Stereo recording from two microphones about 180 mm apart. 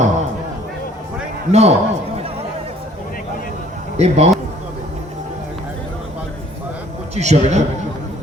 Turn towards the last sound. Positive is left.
turn(degrees=-40)  # may be behind; listen again after turning